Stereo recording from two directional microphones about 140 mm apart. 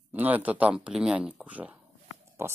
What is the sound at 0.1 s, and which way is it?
Speech, 10° right (ahead or behind).